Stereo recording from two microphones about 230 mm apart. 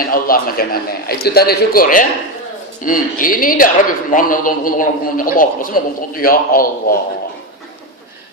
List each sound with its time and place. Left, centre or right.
0.0 s a man's voice: left